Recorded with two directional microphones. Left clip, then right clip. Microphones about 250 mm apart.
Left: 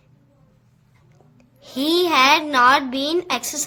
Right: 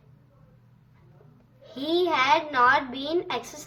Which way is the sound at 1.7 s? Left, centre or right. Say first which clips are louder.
Left 7 dB; left.